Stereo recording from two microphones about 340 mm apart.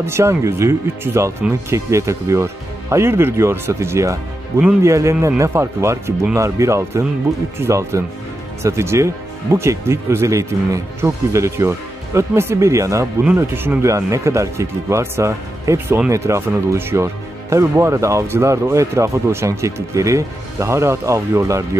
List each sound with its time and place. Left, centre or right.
0.0 s speech: centre